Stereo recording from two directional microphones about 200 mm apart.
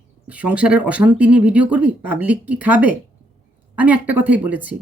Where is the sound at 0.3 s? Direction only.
5° right (ahead or behind).